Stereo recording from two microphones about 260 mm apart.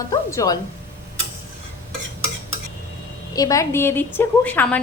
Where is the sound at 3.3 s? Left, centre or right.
Centre.